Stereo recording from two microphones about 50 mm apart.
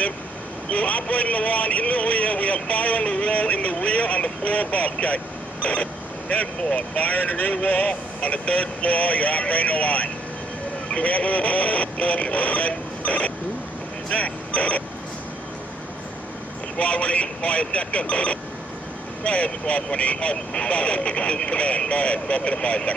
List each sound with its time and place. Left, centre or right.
0.7 s a man's voice: left
14.0 s vehicle: left
16.7 s a man's voice: left